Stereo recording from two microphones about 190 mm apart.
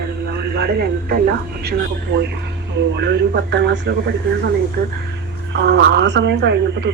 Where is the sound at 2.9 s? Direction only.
65° right (ahead or behind).